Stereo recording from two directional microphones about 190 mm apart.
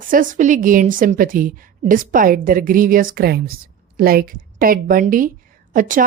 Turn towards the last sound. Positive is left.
turn(degrees=-45)  # may be behind; listen again after turning